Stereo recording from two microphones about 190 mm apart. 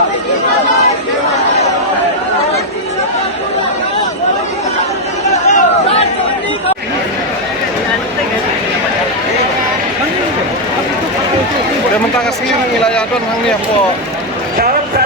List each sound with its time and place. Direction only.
5.5 s chatter: 35° left (ahead or behind)